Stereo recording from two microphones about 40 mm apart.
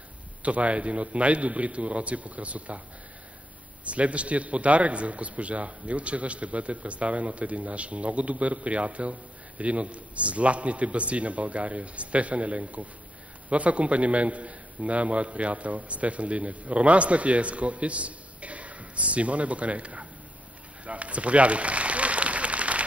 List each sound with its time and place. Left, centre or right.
0.4 s a man's voice: right
3.8 s a man's voice: right
20.8 s applause: right